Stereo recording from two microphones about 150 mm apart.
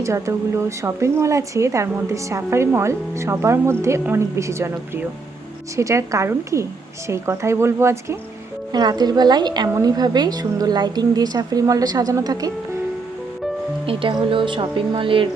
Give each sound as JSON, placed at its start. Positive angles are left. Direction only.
{"t": 0.0, "sound": "a woman's voice", "side_deg": -20}
{"t": 13.8, "sound": "speech", "side_deg": -35}